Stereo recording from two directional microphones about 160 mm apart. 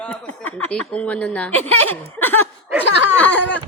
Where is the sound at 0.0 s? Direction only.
10° left (ahead or behind).